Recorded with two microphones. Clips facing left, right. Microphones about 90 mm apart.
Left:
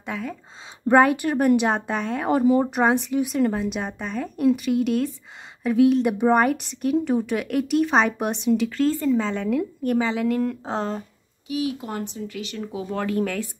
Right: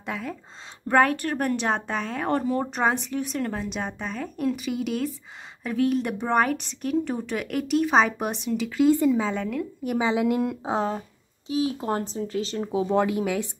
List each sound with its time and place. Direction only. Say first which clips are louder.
0.0 s speech: left 1 dB; centre (ahead or behind)
0.8 s speech: left 4 dB; 15° left (ahead or behind)
9.8 s a woman's voice: even; 15° right (ahead or behind)
11.4 s speech: right 1 dB; 30° right (ahead or behind)
12.9 s a woman's voice: even; 10° right (ahead or behind)